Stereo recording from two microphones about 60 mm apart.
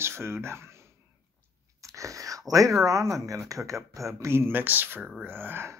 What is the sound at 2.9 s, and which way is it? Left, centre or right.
Speech, right.